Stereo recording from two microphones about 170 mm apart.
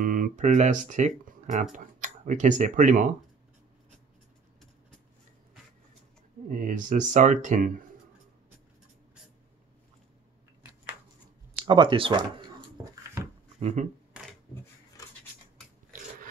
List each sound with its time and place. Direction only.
0.0 s speech: 50° right (ahead or behind)
6.5 s speech: 50° right (ahead or behind)
11.5 s speech: 25° right (ahead or behind)
13.6 s speech: 40° right (ahead or behind)